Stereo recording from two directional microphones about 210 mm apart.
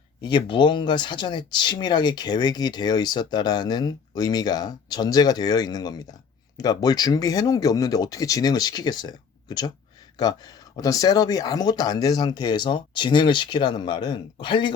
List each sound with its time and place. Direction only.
0.2 s speech: 20° left (ahead or behind)